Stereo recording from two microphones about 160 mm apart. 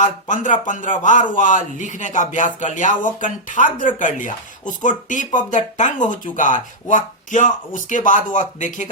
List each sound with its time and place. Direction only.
0.0 s speech: 50° left (ahead or behind)